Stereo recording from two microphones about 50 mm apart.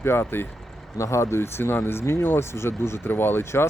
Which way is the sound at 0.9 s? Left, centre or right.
Left.